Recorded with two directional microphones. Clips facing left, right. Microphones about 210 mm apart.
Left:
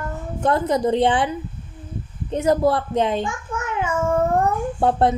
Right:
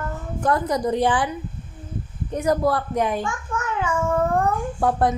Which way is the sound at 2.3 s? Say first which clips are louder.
Left 3 dB; 25° left (ahead or behind).